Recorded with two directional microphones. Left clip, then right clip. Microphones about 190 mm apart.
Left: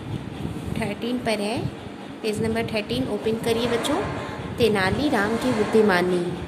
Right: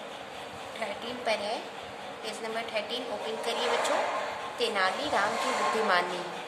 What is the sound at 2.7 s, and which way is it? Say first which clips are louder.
A woman's voice: left 6 dB; 35° left (ahead or behind).